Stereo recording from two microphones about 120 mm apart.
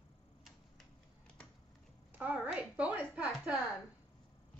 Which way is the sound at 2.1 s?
15° right (ahead or behind).